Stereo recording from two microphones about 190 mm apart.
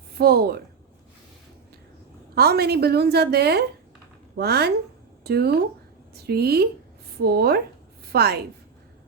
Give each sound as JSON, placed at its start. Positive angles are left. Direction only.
{"t": 0.2, "sound": "a woman's voice", "side_deg": -55}
{"t": 2.3, "sound": "a woman's voice", "side_deg": -55}